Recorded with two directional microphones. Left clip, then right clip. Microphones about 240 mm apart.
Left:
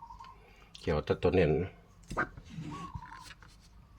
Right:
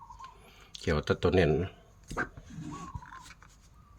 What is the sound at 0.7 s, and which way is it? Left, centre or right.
Speech, right.